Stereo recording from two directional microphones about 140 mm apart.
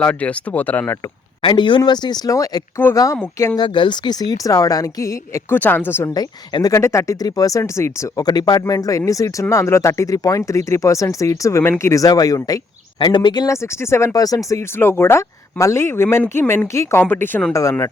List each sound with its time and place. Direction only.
0.0 s speech: 10° left (ahead or behind)
1.4 s speech: 35° left (ahead or behind); by 6.1 s 15° left (ahead or behind)
6.1 s speech: 25° left (ahead or behind)